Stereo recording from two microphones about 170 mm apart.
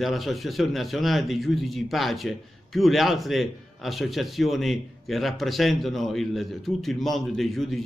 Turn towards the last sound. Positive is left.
turn(degrees=0)  # may be behind; listen again after turning